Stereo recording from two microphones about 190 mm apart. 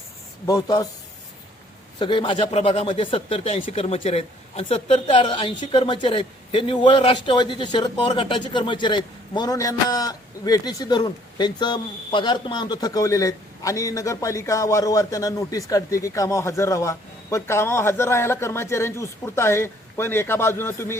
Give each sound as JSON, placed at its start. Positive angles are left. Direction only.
{"t": 0.4, "sound": "a man's voice", "side_deg": 20}
{"t": 2.0, "sound": "speech", "side_deg": 25}